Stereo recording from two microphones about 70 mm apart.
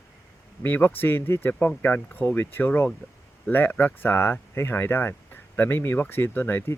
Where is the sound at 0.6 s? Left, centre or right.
Left.